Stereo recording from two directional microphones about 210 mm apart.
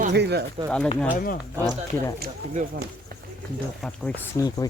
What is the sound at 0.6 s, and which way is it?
Speech, 5° left (ahead or behind).